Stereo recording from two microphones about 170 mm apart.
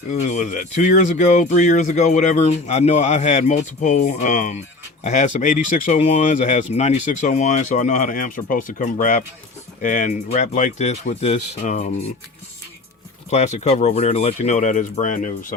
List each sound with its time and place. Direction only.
0.1 s speech: 45° left (ahead or behind)
13.3 s speech: 40° left (ahead or behind)